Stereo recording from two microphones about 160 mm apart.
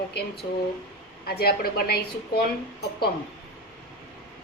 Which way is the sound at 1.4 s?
75° left (ahead or behind).